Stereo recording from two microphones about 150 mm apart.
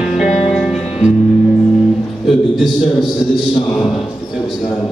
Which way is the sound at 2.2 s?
Centre (ahead or behind).